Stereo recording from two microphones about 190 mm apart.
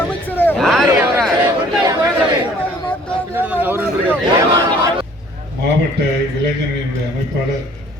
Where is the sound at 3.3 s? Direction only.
10° right (ahead or behind).